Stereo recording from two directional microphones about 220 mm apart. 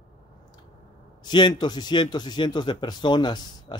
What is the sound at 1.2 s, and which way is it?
A man's voice, 20° left (ahead or behind).